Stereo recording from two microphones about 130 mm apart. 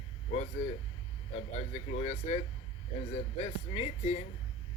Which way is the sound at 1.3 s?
60° left (ahead or behind).